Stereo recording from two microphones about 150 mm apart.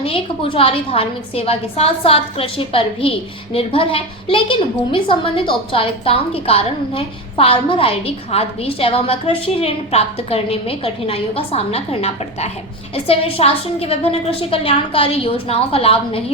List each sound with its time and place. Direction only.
0.0 s a woman's voice: 35° left (ahead or behind)